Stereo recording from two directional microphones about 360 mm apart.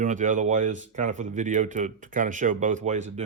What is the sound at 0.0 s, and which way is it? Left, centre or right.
Speech, right.